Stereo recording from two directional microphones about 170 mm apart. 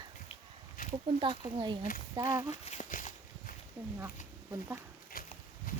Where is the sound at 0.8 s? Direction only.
55° left (ahead or behind).